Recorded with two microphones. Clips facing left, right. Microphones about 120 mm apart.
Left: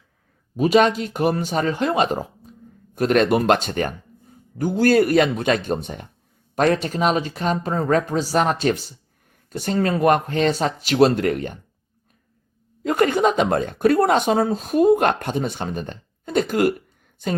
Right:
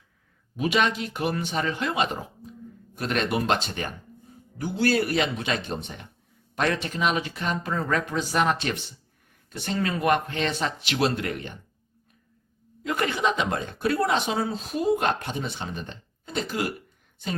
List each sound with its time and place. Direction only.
0.5 s a woman's voice: 40° left (ahead or behind)
12.8 s a woman's voice: 45° left (ahead or behind)